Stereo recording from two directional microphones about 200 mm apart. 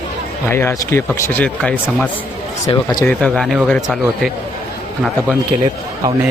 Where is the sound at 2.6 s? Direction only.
20° left (ahead or behind).